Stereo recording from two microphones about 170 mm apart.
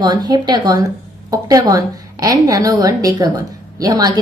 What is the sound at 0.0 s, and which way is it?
A woman's voice, 25° right (ahead or behind).